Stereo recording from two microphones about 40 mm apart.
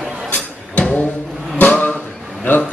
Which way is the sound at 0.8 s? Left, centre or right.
Left.